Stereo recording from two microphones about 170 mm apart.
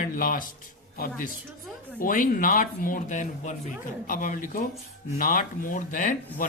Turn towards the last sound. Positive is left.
turn(degrees=50)  # may be behind; listen again after turning